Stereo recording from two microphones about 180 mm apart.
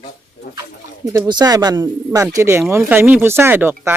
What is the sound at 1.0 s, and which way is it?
Speech, 20° right (ahead or behind).